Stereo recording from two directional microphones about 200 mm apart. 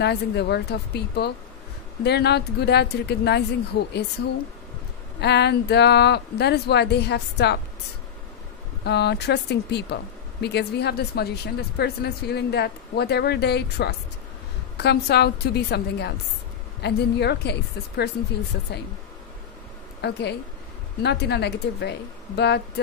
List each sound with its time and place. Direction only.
0.0 s speech: 55° left (ahead or behind)
5.2 s speech: 55° left (ahead or behind)
8.8 s a woman's voice: 55° left (ahead or behind)
20.0 s speech: 55° left (ahead or behind)